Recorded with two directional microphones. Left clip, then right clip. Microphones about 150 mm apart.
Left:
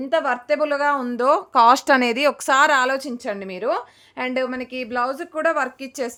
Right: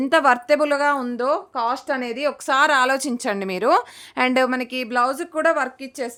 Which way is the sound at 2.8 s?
20° right (ahead or behind).